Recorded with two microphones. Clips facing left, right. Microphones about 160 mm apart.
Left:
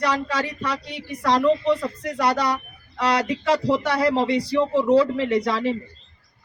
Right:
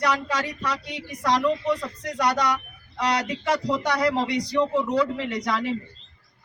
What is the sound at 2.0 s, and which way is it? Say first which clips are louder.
A woman's voice: left 1 dB; 30° left (ahead or behind).